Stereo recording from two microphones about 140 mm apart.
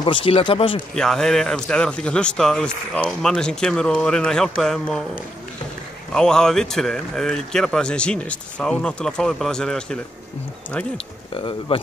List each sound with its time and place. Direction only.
0.0 s speech: 40° left (ahead or behind)
0.9 s speech: 5° left (ahead or behind)
6.1 s speech: 5° left (ahead or behind)
11.3 s speech: 40° left (ahead or behind)